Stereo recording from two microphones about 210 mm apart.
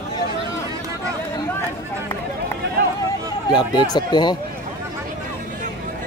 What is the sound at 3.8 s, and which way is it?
Speech, 20° left (ahead or behind).